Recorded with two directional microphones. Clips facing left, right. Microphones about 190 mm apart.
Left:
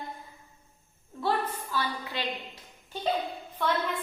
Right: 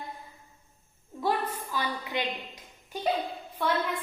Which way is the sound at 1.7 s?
15° right (ahead or behind).